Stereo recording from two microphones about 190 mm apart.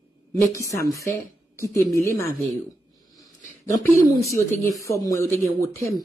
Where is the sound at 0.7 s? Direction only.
15° left (ahead or behind).